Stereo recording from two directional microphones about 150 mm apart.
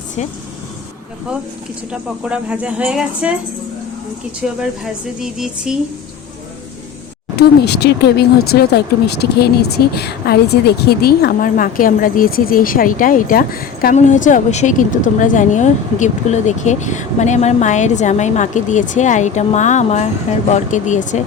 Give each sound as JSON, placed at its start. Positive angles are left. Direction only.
{"t": 0.2, "sound": "a woman's voice", "side_deg": 50}
{"t": 1.9, "sound": "speech", "side_deg": -5}
{"t": 4.4, "sound": "speech", "side_deg": -5}
{"t": 7.3, "sound": "speech", "side_deg": 90}
{"t": 13.9, "sound": "a woman's voice", "side_deg": 55}